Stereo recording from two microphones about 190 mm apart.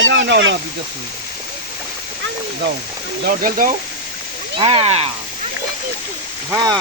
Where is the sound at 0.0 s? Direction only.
70° right (ahead or behind).